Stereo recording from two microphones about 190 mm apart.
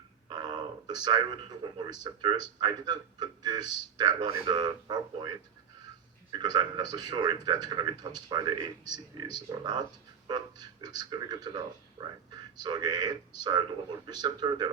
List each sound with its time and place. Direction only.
0.3 s a man's voice: 20° right (ahead or behind)
6.3 s a man's voice: 20° right (ahead or behind)